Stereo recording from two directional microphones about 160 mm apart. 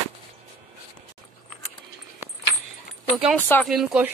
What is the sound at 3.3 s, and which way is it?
Speech, 10° left (ahead or behind).